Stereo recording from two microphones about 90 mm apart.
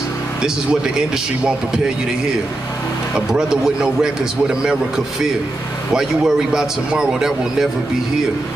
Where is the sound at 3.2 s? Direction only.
10° right (ahead or behind).